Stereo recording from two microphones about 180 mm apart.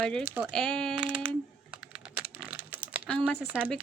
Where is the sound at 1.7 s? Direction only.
5° right (ahead or behind).